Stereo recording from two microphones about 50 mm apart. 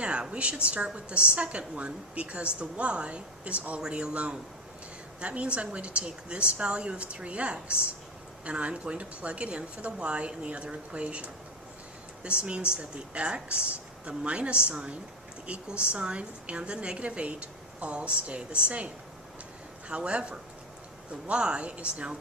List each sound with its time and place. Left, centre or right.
0.0 s a woman's voice: right
3.8 s a woman's voice: centre
19.9 s a woman's voice: right